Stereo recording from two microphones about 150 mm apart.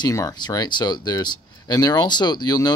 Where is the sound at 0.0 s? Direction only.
25° left (ahead or behind).